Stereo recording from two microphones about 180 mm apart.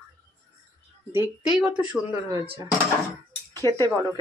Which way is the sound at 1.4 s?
5° right (ahead or behind).